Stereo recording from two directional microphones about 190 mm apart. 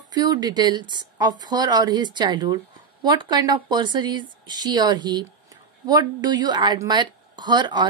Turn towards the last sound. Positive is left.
turn(degrees=-25)  # may be behind; listen again after turning